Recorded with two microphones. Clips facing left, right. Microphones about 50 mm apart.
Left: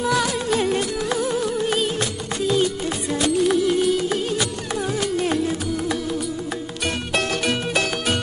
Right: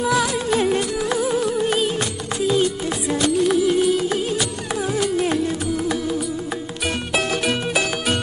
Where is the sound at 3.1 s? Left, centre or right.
Centre.